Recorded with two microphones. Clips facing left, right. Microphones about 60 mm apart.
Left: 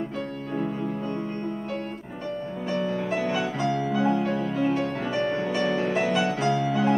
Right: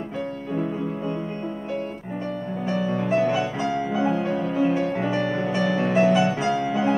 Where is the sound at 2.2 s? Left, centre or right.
Centre.